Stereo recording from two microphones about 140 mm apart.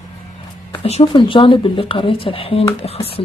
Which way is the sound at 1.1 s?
35° left (ahead or behind).